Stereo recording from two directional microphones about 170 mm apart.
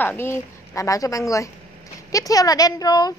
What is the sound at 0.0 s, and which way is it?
Speech, 10° left (ahead or behind).